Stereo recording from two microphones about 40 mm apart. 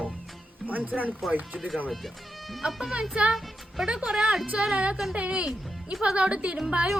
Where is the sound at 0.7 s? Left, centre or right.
Right.